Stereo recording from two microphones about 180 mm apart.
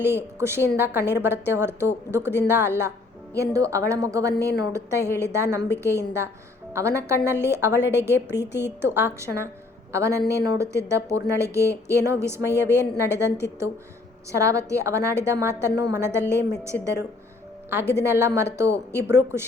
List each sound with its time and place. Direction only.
0.0 s a woman's voice: 15° right (ahead or behind)
17.9 s a woman's voice: 15° right (ahead or behind)